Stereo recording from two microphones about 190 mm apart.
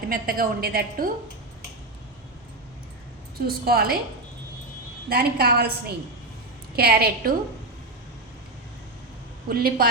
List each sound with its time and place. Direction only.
0.1 s a woman's voice: 50° right (ahead or behind)
3.4 s a woman's voice: 55° right (ahead or behind)
5.0 s a woman's voice: 55° right (ahead or behind)
9.5 s a woman's voice: 50° right (ahead or behind)